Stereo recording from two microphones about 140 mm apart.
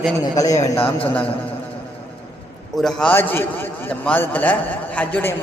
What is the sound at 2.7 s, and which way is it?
A man's voice, 5° left (ahead or behind).